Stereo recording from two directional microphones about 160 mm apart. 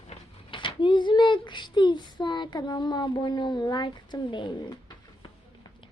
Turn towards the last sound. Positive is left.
turn(degrees=30)  # may be behind; listen again after turning